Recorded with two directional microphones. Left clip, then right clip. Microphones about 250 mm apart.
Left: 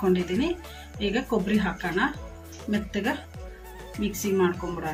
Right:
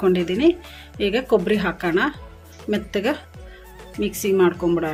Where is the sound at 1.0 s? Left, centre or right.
Right.